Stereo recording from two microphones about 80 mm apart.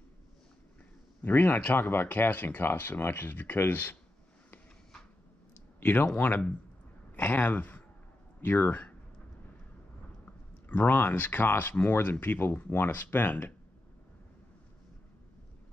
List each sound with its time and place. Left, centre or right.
1.2 s speech: left
5.8 s speech: left
10.7 s speech: left